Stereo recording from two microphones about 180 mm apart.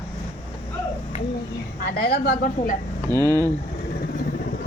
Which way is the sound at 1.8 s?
55° left (ahead or behind).